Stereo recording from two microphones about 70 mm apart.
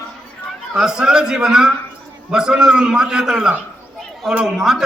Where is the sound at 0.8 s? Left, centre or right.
Centre.